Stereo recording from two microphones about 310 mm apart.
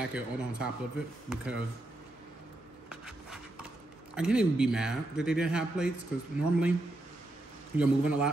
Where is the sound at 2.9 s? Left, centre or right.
Centre.